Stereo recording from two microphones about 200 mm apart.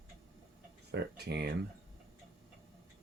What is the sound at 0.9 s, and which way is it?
Speech, 55° right (ahead or behind).